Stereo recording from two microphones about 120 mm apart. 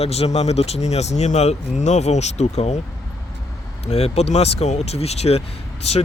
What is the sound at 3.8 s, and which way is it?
Speech, 60° left (ahead or behind).